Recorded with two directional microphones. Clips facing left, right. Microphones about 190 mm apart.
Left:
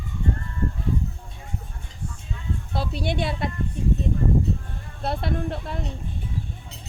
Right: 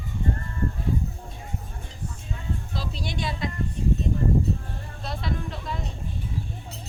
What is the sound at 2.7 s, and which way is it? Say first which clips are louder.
Speech: left 9 dB; 60° left (ahead or behind).